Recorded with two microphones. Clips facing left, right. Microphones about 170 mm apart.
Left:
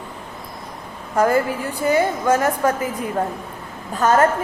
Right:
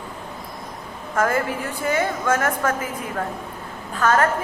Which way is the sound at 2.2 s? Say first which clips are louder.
Left 4 dB; 15° left (ahead or behind).